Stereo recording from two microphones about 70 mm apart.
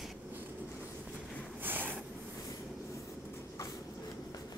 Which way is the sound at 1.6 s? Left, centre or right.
Right.